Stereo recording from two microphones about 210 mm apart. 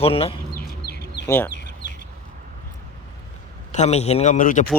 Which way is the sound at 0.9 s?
50° left (ahead or behind).